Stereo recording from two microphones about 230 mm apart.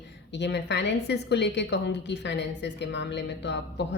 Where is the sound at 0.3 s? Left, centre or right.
Left.